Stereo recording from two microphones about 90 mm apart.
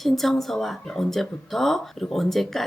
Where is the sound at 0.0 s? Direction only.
5° left (ahead or behind).